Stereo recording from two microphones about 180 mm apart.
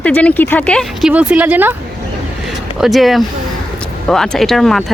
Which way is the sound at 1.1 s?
10° right (ahead or behind).